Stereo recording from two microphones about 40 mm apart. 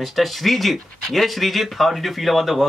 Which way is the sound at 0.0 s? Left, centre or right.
Centre.